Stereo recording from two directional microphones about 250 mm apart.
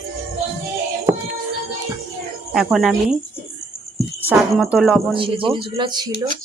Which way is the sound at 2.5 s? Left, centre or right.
Centre.